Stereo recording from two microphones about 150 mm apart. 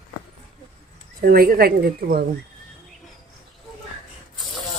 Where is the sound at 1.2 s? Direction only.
75° right (ahead or behind).